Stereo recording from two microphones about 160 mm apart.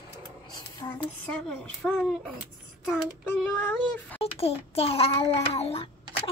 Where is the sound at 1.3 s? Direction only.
5° left (ahead or behind).